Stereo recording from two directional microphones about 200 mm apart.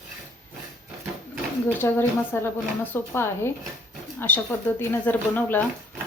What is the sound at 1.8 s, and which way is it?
A woman's voice, 10° left (ahead or behind).